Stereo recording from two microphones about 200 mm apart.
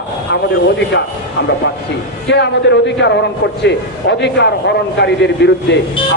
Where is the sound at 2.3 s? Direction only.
60° left (ahead or behind).